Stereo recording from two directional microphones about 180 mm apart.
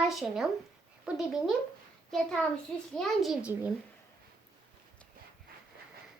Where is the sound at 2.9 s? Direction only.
Centre (ahead or behind).